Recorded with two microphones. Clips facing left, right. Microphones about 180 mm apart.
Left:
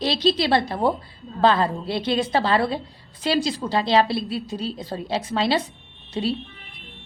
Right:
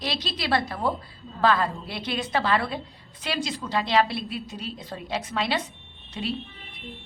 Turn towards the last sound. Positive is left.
turn(degrees=30)  # may be behind; listen again after turning